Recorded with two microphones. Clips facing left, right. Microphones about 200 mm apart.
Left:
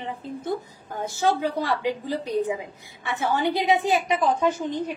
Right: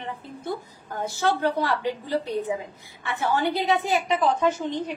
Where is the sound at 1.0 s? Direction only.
15° left (ahead or behind).